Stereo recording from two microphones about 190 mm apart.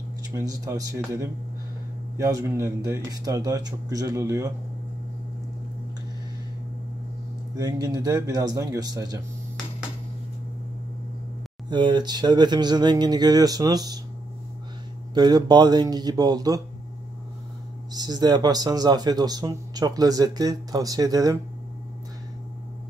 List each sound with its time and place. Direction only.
0.3 s speech: 15° right (ahead or behind)
7.5 s speech: 20° right (ahead or behind)
11.7 s speech: 25° right (ahead or behind)
15.1 s speech: 20° right (ahead or behind)
17.9 s speech: 20° right (ahead or behind)